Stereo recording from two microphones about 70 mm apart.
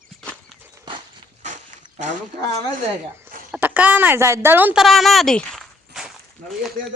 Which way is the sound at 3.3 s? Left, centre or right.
Right.